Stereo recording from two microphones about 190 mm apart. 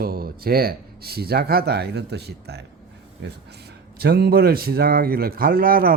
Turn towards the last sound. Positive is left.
turn(degrees=-50)  # may be behind; listen again after turning